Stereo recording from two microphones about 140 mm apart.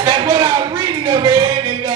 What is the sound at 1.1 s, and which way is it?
Music, 35° right (ahead or behind).